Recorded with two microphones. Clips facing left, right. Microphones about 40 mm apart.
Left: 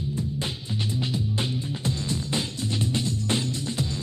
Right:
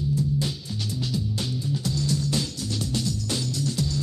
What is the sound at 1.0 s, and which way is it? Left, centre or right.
Music, left.